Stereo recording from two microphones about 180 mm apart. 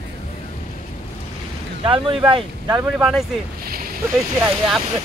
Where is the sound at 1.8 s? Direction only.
30° right (ahead or behind).